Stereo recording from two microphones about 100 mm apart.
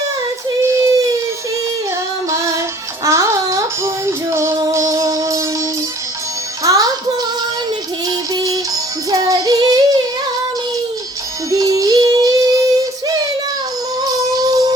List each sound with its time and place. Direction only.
0.6 s child singing: 30° right (ahead or behind)
3.0 s music: 35° right (ahead or behind)
6.7 s music: 40° right (ahead or behind)
11.5 s music: 35° right (ahead or behind)
14.0 s music: 40° right (ahead or behind)